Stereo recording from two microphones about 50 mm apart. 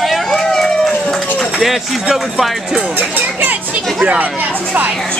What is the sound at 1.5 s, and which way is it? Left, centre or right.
Music, centre.